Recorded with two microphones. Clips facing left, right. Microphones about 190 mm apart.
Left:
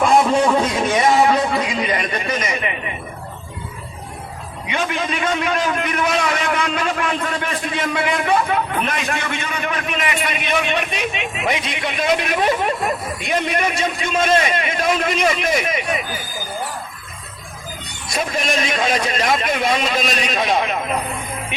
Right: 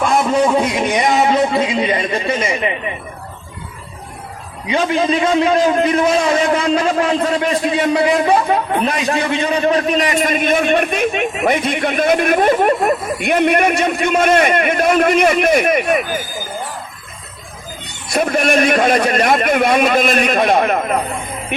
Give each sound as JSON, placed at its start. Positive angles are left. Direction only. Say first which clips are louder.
{"t": 0.0, "sound": "a sound", "louder": "even", "side_deg": -5}
{"t": 4.7, "sound": "a man's voice", "louder": "right 7 dB", "side_deg": -30}
{"t": 18.1, "sound": "a man's voice", "louder": "right 7 dB", "side_deg": -60}